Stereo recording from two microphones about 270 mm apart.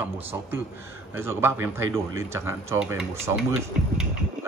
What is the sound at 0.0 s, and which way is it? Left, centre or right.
Speech, centre.